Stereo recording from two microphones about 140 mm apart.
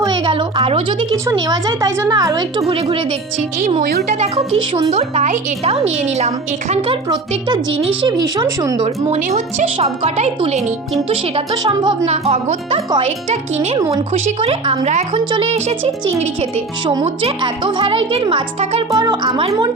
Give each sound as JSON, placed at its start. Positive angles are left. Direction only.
{"t": 0.0, "sound": "a sound", "side_deg": -35}
{"t": 1.1, "sound": "a woman's voice", "side_deg": -25}
{"t": 2.6, "sound": "speech", "side_deg": -40}
{"t": 3.8, "sound": "speech", "side_deg": -55}
{"t": 7.1, "sound": "a woman's voice", "side_deg": -30}
{"t": 8.8, "sound": "speech", "side_deg": -50}
{"t": 11.6, "sound": "a woman's voice", "side_deg": -30}
{"t": 12.0, "sound": "speech", "side_deg": -50}
{"t": 15.1, "sound": "speech", "side_deg": -40}
{"t": 18.9, "sound": "a woman's voice", "side_deg": -25}